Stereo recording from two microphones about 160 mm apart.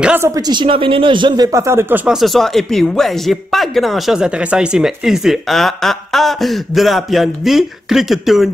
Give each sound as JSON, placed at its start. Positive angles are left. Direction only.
{"t": 0.0, "sound": "speech", "side_deg": -10}
{"t": 0.3, "sound": "speech", "side_deg": -25}